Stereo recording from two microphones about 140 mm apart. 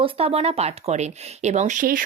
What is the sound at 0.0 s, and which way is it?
Speech, 45° right (ahead or behind).